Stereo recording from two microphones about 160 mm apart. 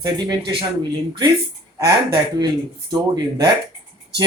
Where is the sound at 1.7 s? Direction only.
25° right (ahead or behind).